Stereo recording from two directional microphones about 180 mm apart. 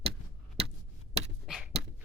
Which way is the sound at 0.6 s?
35° right (ahead or behind).